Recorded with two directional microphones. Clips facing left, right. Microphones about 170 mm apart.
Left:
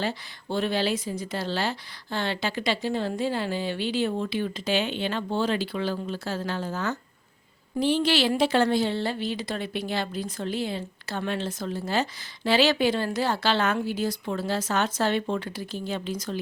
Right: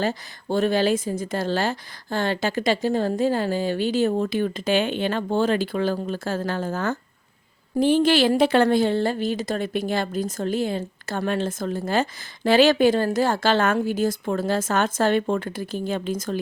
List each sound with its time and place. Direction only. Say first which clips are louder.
0.0 s a woman's voice: right 5 dB; 45° right (ahead or behind)